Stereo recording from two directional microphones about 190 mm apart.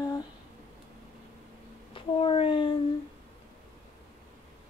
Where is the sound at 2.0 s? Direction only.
30° left (ahead or behind).